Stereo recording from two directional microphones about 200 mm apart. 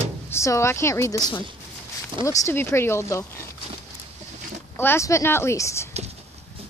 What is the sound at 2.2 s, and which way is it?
A woman's voice, 15° left (ahead or behind).